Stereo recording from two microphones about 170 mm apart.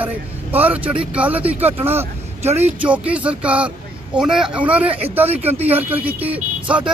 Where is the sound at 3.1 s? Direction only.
10° right (ahead or behind).